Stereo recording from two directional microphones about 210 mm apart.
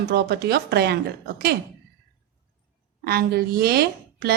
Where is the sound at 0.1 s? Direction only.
50° right (ahead or behind).